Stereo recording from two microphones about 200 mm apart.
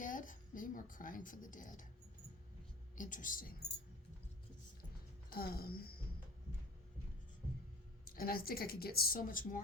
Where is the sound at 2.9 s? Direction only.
40° left (ahead or behind).